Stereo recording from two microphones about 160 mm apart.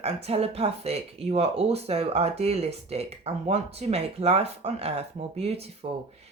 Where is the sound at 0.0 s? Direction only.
40° right (ahead or behind).